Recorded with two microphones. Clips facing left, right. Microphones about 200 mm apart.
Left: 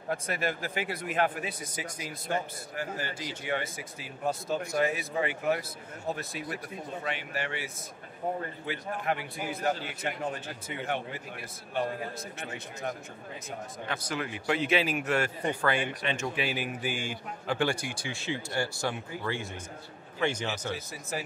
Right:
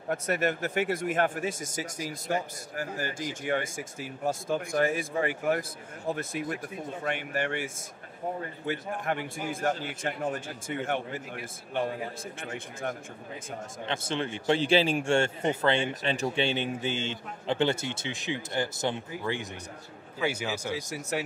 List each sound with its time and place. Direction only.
0.7 s speech: 50° right (ahead or behind)
12.4 s speech: 50° right (ahead or behind)
13.8 s a man's voice: 25° right (ahead or behind)
15.9 s a man's voice: 35° right (ahead or behind); by 19.4 s 20° right (ahead or behind)
20.2 s speech: 10° right (ahead or behind)
21.1 s speech: 75° right (ahead or behind)